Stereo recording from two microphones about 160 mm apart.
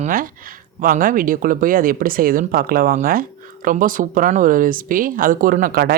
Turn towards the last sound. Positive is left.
turn(degrees=-70)  # may be behind; listen again after turning